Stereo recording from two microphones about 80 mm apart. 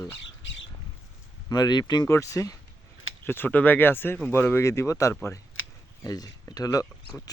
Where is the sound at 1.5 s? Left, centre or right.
Left.